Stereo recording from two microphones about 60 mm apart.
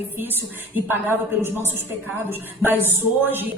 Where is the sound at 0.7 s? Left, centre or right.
Right.